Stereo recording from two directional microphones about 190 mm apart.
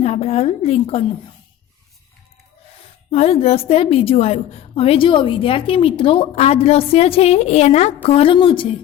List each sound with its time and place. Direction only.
0.0 s a woman's voice: 35° left (ahead or behind)
3.1 s a woman's voice: 35° left (ahead or behind)